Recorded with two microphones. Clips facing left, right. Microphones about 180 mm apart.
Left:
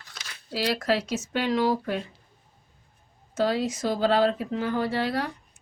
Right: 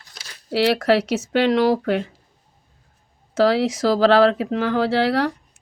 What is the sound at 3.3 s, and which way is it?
Speech, 80° right.